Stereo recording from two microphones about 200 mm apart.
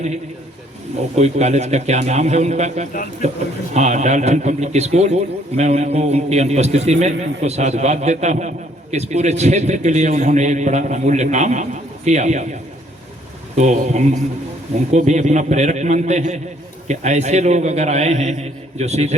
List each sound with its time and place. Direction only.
1.1 s a man's voice: 35° right (ahead or behind)
13.6 s a man's voice: 35° right (ahead or behind)